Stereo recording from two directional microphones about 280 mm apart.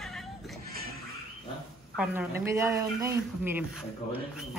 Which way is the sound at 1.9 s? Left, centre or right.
Centre.